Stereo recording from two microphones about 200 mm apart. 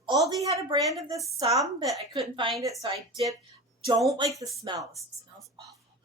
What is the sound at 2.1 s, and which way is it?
Speech, 25° right (ahead or behind).